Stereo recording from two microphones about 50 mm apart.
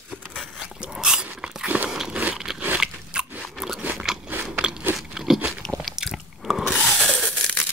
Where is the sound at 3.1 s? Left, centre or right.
Centre.